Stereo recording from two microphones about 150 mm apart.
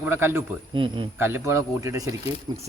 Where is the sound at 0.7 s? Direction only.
35° right (ahead or behind).